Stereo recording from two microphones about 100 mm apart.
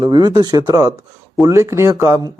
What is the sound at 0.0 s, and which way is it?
A man's voice, 45° right (ahead or behind).